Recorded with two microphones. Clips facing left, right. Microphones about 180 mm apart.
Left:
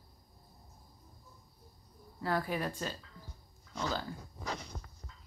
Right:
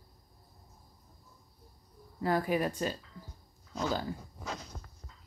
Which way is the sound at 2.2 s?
15° right (ahead or behind).